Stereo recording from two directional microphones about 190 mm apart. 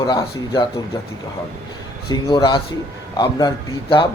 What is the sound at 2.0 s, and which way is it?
Speech, 25° left (ahead or behind).